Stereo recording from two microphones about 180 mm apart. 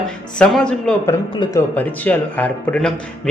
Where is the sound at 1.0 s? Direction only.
15° left (ahead or behind).